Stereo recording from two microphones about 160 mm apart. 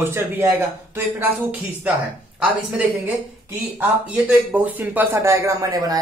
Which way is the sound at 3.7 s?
10° right (ahead or behind).